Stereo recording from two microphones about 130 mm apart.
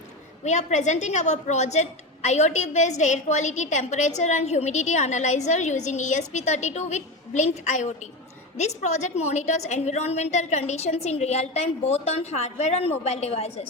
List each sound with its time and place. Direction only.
0.4 s a woman's voice: 60° left (ahead or behind)